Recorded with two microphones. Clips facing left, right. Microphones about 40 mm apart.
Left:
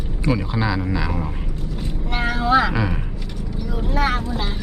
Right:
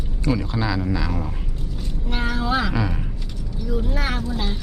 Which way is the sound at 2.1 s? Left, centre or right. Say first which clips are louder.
Left 5 dB; centre.